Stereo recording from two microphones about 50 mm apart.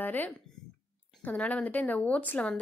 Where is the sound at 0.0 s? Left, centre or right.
Left.